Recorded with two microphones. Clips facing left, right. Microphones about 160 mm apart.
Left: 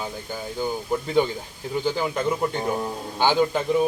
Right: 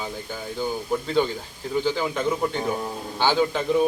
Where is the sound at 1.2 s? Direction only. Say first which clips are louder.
Left 1 dB; 15° left (ahead or behind).